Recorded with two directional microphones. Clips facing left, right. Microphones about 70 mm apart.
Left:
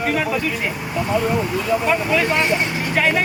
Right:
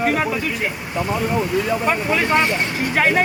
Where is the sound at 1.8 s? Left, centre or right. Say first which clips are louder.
Left 1 dB; centre.